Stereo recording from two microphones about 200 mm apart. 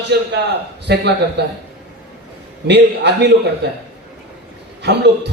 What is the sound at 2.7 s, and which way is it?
A man's voice, 60° right (ahead or behind).